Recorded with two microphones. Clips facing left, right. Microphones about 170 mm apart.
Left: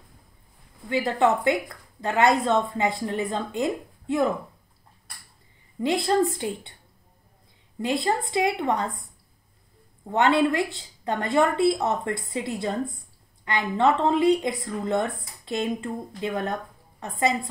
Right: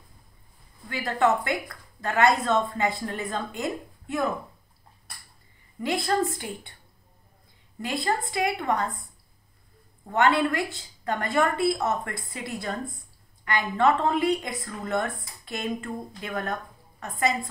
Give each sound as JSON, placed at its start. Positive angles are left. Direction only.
{"t": 0.8, "sound": "a woman's voice", "side_deg": 20}
{"t": 5.8, "sound": "a woman's voice", "side_deg": 20}
{"t": 7.8, "sound": "a woman's voice", "side_deg": 20}
{"t": 10.0, "sound": "a woman's voice", "side_deg": 20}